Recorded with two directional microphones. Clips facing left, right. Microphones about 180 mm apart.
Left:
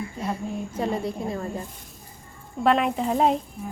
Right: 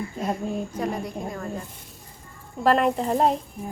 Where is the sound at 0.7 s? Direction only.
25° left (ahead or behind).